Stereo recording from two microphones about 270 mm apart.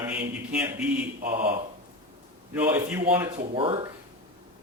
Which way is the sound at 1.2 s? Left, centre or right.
Right.